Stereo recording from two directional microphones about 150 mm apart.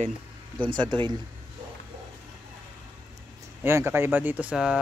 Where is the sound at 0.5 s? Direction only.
30° right (ahead or behind).